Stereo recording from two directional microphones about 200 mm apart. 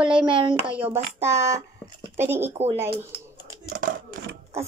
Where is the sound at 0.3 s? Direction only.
25° right (ahead or behind).